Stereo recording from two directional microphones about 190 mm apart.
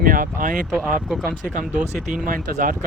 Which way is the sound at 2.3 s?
45° right (ahead or behind).